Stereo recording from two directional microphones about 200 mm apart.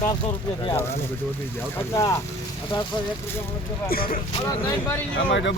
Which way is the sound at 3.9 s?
45° left (ahead or behind).